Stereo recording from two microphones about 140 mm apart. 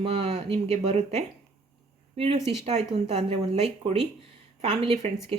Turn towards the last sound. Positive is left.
turn(degrees=-45)  # may be behind; listen again after turning